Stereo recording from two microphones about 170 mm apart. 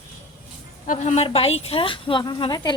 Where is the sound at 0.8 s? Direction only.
40° left (ahead or behind); by 2.7 s 25° left (ahead or behind).